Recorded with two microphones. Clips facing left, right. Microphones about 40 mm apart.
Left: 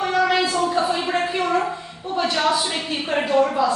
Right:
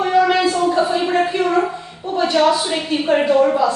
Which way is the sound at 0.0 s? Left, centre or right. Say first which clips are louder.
Right 5 dB; centre.